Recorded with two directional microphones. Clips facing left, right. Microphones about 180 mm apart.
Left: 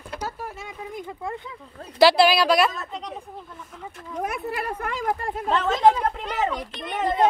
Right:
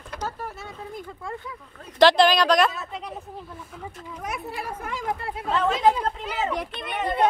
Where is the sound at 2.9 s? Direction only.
5° right (ahead or behind).